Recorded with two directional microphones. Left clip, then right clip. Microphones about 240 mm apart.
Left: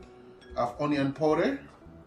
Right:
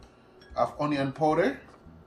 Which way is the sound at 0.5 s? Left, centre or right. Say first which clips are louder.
Right 1 dB; centre.